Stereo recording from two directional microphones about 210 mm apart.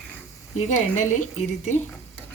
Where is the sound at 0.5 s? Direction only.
35° left (ahead or behind).